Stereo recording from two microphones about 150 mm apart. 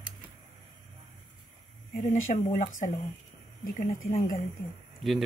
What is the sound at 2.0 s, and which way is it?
Speech, 55° left (ahead or behind).